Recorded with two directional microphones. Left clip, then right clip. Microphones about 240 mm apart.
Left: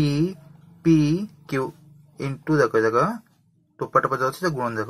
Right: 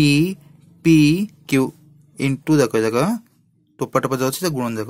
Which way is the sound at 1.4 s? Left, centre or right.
Right.